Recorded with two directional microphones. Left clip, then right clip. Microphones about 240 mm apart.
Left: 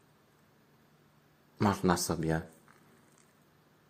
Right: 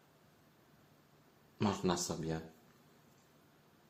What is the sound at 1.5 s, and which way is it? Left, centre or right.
Speech, left.